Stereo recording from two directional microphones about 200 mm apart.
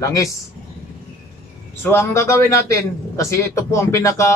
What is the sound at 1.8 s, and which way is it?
A man's voice, 10° left (ahead or behind).